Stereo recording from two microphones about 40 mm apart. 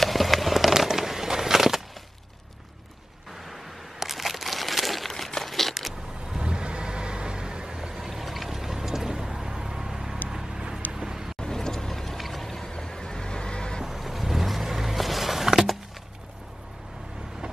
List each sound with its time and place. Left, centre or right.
0.0 s fireworks: centre
0.8 s a sound: centre
4.0 s a sound: centre
6.3 s vehicle: right
10.9 s boat: centre
11.3 s vehicle: centre
13.8 s vehicle: centre